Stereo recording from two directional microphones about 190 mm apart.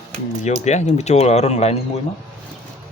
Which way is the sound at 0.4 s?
35° left (ahead or behind).